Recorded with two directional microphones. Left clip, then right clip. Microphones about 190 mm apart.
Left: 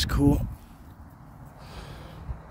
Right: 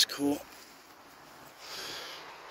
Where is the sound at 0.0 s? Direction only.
35° left (ahead or behind).